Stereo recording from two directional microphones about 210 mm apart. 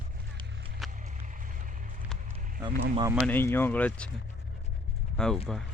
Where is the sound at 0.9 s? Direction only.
35° right (ahead or behind).